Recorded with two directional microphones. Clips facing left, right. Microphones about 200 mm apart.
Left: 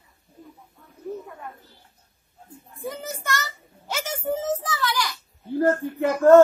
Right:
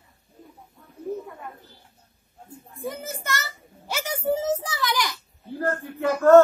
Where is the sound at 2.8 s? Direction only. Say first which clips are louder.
Even; centre (ahead or behind); by 5.2 s 15° right (ahead or behind).